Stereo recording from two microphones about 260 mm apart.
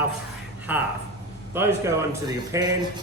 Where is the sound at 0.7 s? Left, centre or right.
Centre.